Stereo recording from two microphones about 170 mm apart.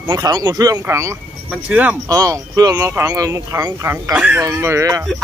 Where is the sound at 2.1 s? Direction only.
20° right (ahead or behind).